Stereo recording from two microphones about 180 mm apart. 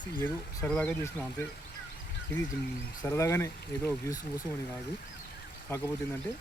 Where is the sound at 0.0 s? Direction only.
10° left (ahead or behind).